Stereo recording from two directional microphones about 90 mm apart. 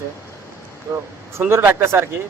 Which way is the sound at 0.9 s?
35° right (ahead or behind).